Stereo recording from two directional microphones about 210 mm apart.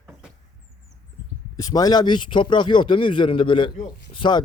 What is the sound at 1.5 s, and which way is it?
A man's voice, 15° left (ahead or behind).